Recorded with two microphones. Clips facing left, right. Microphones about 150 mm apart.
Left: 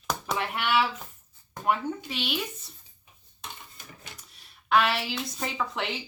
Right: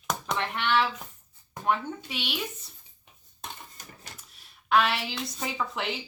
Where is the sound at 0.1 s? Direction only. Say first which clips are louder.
Even; 5° left (ahead or behind).